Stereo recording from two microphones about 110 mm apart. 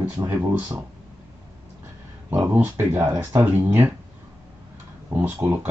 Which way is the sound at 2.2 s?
20° right (ahead or behind).